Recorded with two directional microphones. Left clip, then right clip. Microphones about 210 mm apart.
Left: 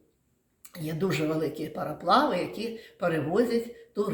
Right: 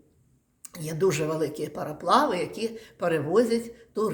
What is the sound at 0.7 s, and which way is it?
Speech, 45° right (ahead or behind).